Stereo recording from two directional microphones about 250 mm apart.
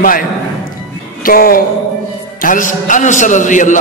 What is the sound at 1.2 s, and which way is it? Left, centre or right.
A man's voice, left.